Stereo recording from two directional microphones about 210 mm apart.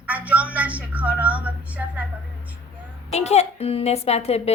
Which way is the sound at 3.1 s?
30° left (ahead or behind).